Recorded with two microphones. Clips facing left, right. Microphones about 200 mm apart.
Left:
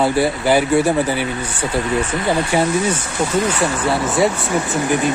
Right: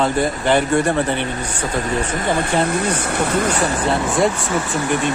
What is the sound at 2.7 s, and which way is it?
Speech, 60° right (ahead or behind).